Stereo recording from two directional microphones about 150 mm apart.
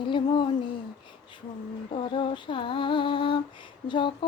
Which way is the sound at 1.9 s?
35° left (ahead or behind).